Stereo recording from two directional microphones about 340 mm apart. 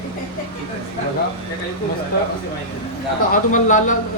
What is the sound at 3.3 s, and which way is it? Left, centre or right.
Speech, left.